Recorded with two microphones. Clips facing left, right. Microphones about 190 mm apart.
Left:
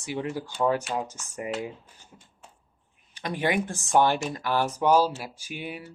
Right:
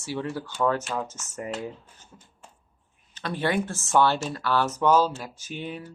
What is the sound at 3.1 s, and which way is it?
Speech, 15° left (ahead or behind).